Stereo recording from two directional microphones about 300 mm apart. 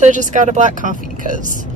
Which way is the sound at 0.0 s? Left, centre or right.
Right.